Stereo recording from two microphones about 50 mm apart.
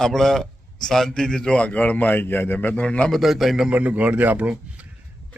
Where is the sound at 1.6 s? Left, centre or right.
Left.